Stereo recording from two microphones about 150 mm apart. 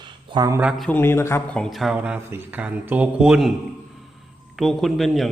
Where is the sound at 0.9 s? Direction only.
15° left (ahead or behind).